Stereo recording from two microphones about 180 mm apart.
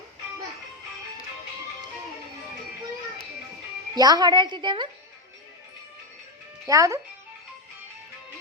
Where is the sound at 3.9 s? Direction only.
20° right (ahead or behind).